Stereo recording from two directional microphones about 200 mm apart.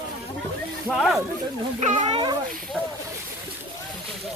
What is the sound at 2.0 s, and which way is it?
Speech, 25° right (ahead or behind).